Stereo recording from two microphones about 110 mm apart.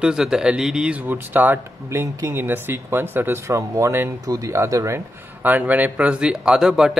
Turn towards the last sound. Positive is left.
turn(degrees=-5)  # may be behind; listen again after turning